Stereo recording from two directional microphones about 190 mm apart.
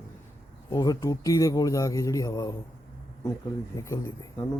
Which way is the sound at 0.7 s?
20° left (ahead or behind).